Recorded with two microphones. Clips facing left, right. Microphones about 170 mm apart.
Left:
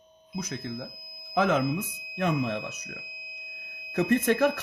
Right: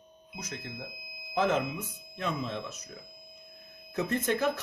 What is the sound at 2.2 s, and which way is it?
Speech, 65° left (ahead or behind).